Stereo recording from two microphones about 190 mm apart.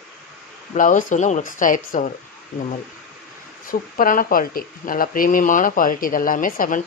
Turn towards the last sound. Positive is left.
turn(degrees=45)  # may be behind; listen again after turning